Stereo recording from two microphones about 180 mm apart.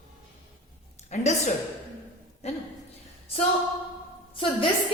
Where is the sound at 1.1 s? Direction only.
40° left (ahead or behind).